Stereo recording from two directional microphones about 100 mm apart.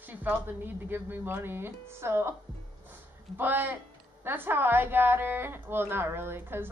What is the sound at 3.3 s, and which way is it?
A woman's voice, 20° right (ahead or behind).